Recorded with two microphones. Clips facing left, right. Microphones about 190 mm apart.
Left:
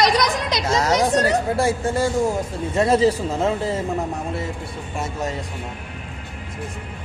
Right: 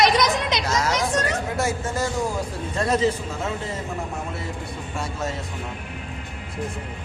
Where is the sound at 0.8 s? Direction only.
35° left (ahead or behind).